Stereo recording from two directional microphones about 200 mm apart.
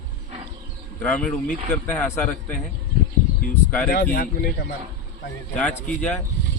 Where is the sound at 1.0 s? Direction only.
5° left (ahead or behind).